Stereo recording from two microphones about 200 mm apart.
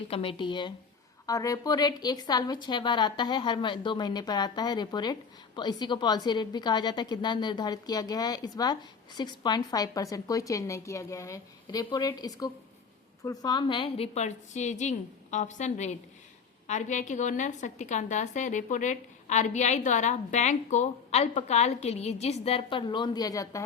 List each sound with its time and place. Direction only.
0.1 s a woman's voice: 25° left (ahead or behind)